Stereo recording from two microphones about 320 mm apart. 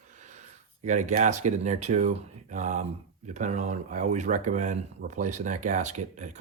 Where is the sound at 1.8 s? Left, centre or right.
Right.